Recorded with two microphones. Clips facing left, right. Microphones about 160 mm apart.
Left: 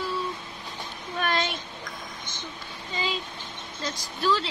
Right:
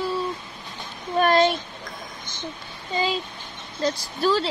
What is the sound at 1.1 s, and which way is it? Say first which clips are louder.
Speech: right 10 dB; 40° right (ahead or behind).